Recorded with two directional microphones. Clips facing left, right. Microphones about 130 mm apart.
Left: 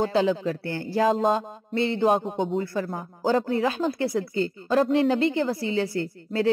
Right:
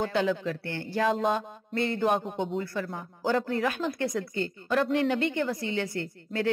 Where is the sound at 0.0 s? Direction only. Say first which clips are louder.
Left 4 dB; 30° left (ahead or behind).